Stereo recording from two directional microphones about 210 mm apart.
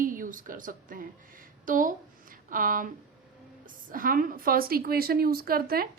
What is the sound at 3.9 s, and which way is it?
A woman's voice, 40° right (ahead or behind).